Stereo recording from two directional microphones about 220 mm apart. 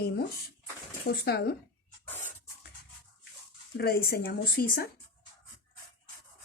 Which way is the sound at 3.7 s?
45° left (ahead or behind).